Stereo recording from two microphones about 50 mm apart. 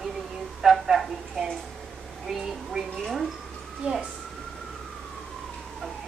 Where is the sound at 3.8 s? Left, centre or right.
Right.